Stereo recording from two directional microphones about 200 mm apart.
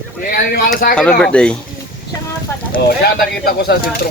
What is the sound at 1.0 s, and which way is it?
Speech, 5° left (ahead or behind).